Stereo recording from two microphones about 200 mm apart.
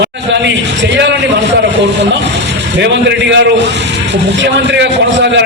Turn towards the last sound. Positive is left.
turn(degrees=-60)  # may be behind; listen again after turning